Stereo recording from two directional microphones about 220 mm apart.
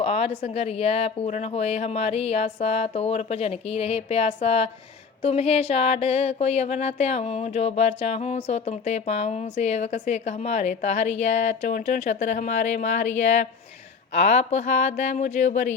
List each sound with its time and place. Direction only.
0.0 s a woman's voice: 25° left (ahead or behind)